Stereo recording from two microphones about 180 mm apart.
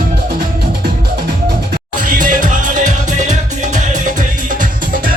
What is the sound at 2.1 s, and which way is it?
Music, 50° right (ahead or behind).